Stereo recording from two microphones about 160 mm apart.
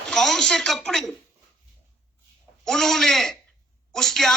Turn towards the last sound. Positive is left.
turn(degrees=0)  # may be behind; listen again after turning